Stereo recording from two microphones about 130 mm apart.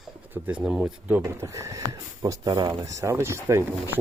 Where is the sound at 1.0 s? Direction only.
15° right (ahead or behind).